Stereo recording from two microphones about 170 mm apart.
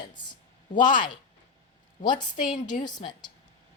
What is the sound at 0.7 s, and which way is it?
Speech, 50° left (ahead or behind).